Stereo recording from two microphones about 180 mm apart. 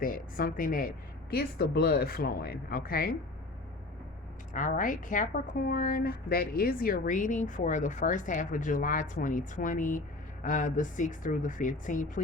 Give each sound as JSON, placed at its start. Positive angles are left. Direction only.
{"t": 0.0, "sound": "speech", "side_deg": 50}
{"t": 4.5, "sound": "a woman's voice", "side_deg": 45}